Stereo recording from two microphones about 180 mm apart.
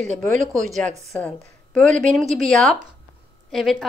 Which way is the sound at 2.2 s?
Centre (ahead or behind).